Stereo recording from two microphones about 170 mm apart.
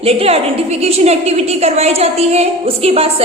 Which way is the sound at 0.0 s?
35° right (ahead or behind).